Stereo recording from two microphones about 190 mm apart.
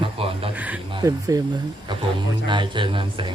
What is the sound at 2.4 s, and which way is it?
Speech, 25° right (ahead or behind).